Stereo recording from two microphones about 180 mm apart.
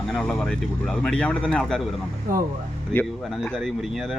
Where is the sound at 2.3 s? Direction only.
50° right (ahead or behind).